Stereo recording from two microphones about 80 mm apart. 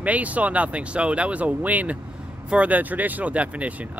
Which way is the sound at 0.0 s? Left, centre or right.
Centre.